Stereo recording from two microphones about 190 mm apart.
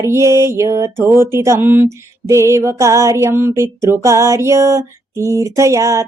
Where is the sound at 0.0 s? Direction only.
15° right (ahead or behind).